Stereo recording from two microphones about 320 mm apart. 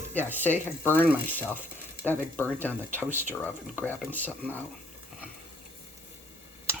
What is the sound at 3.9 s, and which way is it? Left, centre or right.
Speech, centre.